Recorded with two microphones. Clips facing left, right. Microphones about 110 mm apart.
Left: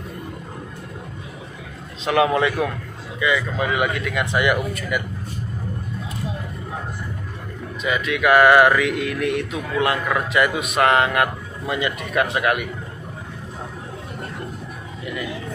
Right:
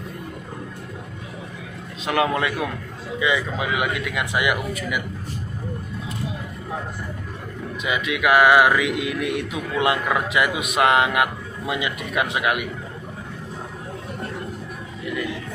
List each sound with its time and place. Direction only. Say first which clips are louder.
2.0 s speech: left 3 dB; centre (ahead or behind)
3.2 s speech: left 1 dB; 20° right (ahead or behind)
3.5 s speech: left 2 dB; 5° right (ahead or behind)
7.8 s speech: left 2 dB; 15° right (ahead or behind)